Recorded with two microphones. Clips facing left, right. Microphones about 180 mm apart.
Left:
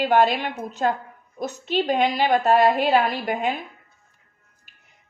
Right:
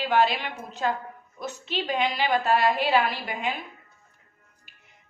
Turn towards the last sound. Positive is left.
turn(degrees=45)  # may be behind; listen again after turning